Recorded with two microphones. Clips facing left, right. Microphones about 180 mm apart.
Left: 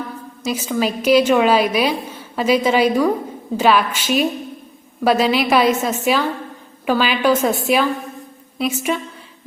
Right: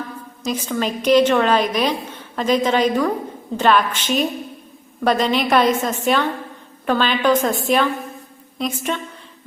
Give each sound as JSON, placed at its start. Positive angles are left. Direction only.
{"t": 0.4, "sound": "a woman's voice", "side_deg": 5}